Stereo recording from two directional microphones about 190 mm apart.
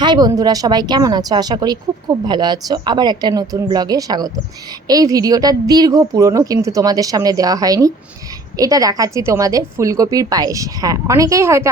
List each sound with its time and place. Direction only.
0.0 s a woman's voice: 20° right (ahead or behind)